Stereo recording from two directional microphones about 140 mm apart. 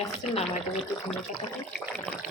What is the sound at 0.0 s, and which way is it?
Speech, 50° left (ahead or behind).